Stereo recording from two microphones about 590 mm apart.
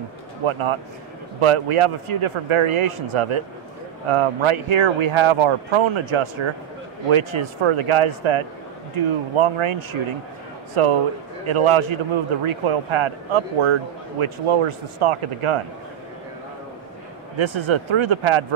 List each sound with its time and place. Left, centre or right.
0.5 s speech: right
17.4 s speech: right